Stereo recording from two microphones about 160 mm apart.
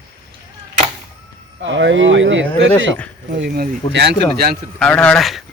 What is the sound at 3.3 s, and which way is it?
Speech, 85° right.